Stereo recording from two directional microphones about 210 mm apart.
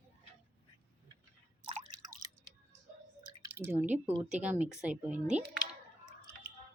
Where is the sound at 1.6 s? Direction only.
25° right (ahead or behind).